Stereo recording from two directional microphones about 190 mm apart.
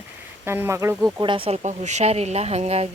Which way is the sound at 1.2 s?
25° right (ahead or behind).